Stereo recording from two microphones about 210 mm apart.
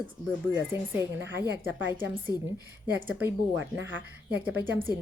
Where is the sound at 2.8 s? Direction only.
10° right (ahead or behind).